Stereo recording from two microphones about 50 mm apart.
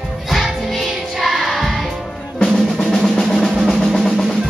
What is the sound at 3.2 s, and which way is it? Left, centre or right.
Drum, centre.